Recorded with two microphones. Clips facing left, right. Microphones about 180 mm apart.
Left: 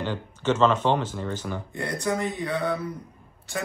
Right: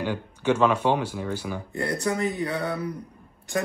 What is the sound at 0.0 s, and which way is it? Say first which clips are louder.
Speech: right 1 dB; 10° right (ahead or behind).